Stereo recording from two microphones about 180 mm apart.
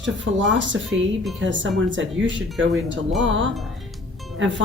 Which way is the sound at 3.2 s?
90° right.